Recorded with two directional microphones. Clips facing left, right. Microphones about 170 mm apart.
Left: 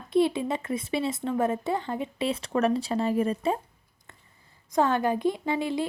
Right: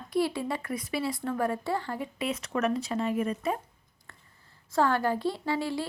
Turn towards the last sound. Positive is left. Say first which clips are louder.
# left 2 dB
turn(degrees=20)  # may be behind; listen again after turning